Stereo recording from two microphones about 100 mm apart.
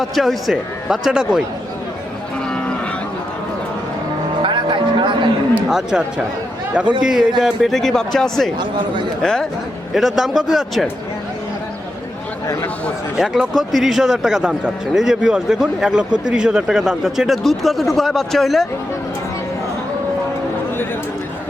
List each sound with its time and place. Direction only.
0.0 s a man's voice: centre (ahead or behind)
2.5 s cattle: 10° left (ahead or behind)
4.4 s a sound: 55° right (ahead or behind)
5.6 s a man's voice: 5° right (ahead or behind)
7.0 s a man's voice: 5° right (ahead or behind)
13.1 s a man's voice: 5° right (ahead or behind)